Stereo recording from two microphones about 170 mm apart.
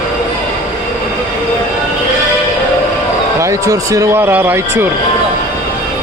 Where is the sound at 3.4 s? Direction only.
20° right (ahead or behind).